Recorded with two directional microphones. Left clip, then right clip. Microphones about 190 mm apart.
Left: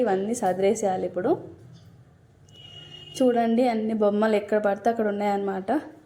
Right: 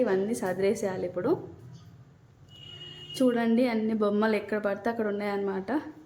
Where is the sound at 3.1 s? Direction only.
5° left (ahead or behind).